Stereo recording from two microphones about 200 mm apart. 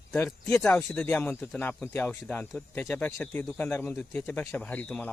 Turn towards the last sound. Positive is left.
turn(degrees=10)  # may be behind; listen again after turning